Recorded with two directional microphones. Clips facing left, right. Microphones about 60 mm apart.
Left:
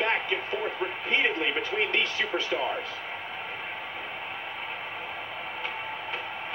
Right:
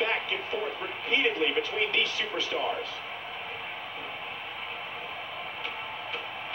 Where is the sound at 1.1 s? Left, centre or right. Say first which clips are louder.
Right 1 dB; left.